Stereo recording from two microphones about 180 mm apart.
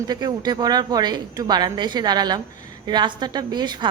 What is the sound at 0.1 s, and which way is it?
Speech, 20° right (ahead or behind).